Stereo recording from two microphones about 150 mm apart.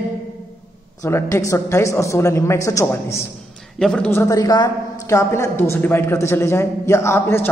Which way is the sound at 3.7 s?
5° left (ahead or behind).